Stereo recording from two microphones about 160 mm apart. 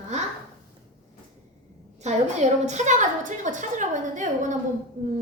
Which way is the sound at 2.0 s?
45° right (ahead or behind).